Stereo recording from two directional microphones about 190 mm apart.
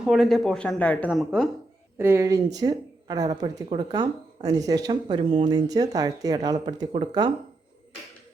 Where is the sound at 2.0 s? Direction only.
15° right (ahead or behind).